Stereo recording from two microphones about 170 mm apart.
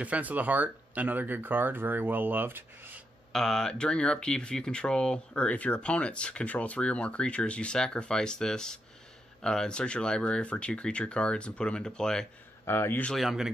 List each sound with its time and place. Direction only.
0.0 s speech: 10° right (ahead or behind)
3.3 s speech: 5° left (ahead or behind)
13.1 s speech: centre (ahead or behind)